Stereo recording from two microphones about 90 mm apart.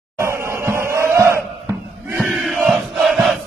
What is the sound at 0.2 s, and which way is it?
Crowd, 30° right (ahead or behind).